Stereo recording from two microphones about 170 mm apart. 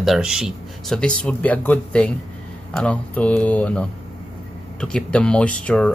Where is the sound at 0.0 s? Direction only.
5° right (ahead or behind).